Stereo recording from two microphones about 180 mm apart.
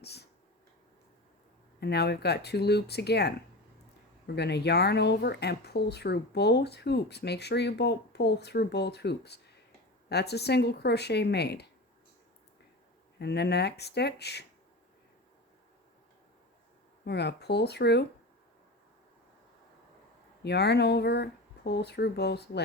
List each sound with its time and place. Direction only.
0.0 s a sound: 65° left (ahead or behind)
1.8 s speech: 65° left (ahead or behind)
4.4 s speech: 70° left (ahead or behind)
13.1 s speech: 65° left (ahead or behind)
17.1 s speech: 70° left (ahead or behind)
20.4 s speech: 65° left (ahead or behind)